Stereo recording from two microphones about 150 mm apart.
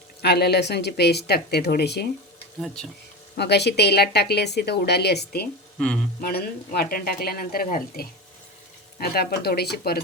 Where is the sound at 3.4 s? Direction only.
90° left; by 8.1 s 70° left (ahead or behind).